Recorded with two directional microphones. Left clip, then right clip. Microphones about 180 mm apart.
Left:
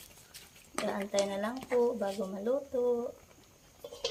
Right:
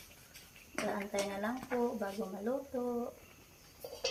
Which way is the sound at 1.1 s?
30° left (ahead or behind).